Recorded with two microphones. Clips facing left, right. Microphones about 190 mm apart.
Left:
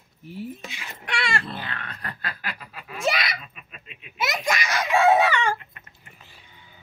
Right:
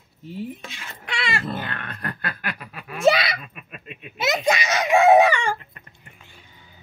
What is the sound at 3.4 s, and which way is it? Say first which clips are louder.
Hiccup: right 6 dB; 55° right (ahead or behind).